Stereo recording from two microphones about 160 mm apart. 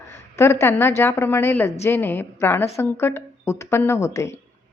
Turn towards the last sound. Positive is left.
turn(degrees=20)  # may be behind; listen again after turning